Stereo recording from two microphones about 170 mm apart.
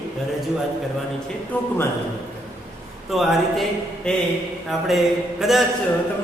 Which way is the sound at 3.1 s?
Centre (ahead or behind).